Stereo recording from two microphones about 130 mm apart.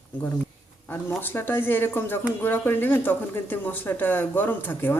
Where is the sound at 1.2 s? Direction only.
15° left (ahead or behind).